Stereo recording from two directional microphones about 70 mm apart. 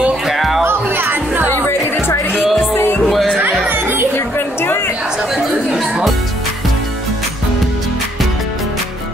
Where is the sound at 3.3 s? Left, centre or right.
Right.